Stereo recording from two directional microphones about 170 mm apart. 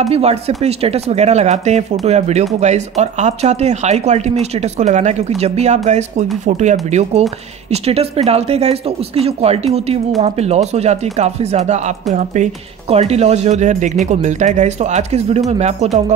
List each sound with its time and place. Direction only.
0.0 s speech: 40° right (ahead or behind)